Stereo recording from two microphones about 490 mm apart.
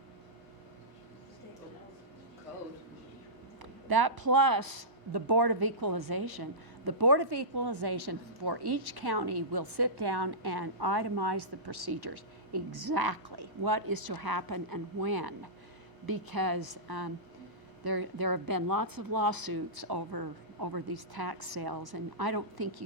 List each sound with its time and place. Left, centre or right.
3.6 s speech: right